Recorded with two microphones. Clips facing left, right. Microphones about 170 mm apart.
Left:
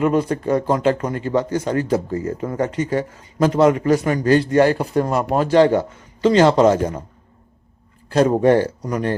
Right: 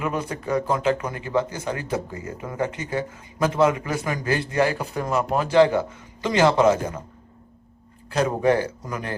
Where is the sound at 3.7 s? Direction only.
35° left (ahead or behind).